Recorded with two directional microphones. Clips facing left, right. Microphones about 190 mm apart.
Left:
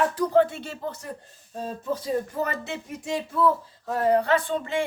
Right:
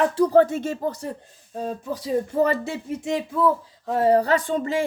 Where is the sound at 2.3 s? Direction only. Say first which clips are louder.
Right 8 dB; 30° right (ahead or behind).